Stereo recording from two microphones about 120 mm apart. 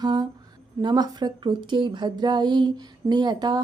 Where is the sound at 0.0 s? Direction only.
35° right (ahead or behind).